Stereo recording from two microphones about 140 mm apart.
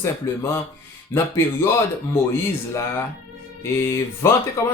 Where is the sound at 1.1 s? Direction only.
15° left (ahead or behind).